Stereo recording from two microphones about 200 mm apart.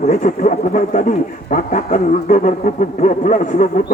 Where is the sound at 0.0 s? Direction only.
35° left (ahead or behind).